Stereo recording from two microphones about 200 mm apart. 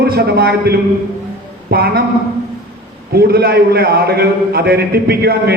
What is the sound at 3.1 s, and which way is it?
A man's voice, 50° right (ahead or behind).